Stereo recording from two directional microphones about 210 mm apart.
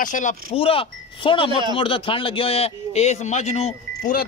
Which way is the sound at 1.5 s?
20° right (ahead or behind).